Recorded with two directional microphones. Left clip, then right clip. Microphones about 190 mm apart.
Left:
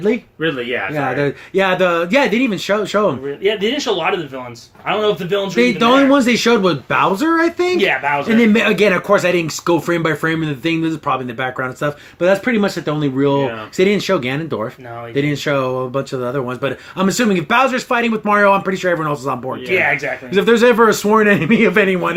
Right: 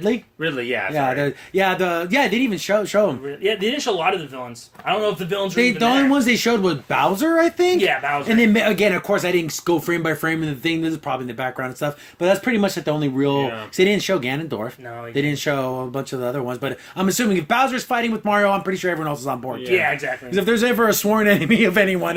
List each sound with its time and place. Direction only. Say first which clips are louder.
0.4 s speech: left 3 dB; 50° right (ahead or behind)
0.9 s speech: left 2 dB; 20° right (ahead or behind)